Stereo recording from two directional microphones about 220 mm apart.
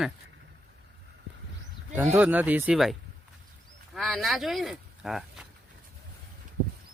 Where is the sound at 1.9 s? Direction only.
10° right (ahead or behind).